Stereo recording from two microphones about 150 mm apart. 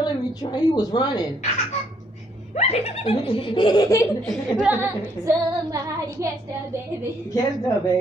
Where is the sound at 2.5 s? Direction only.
45° left (ahead or behind); by 4.0 s 25° left (ahead or behind).